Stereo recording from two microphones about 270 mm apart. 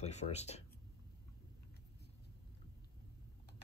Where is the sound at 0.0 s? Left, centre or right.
Left.